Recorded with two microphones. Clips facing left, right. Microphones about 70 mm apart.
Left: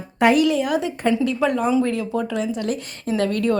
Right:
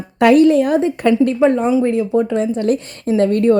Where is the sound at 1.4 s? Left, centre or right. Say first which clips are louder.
Right 7 dB; right.